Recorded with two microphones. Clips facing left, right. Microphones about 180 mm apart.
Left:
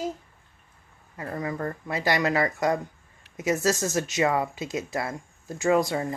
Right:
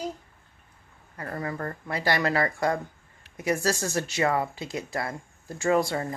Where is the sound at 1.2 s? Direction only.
15° left (ahead or behind).